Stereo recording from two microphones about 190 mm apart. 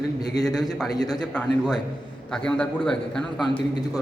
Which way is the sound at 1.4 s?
5° left (ahead or behind).